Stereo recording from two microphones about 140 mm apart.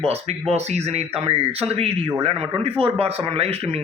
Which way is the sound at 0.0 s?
45° right (ahead or behind).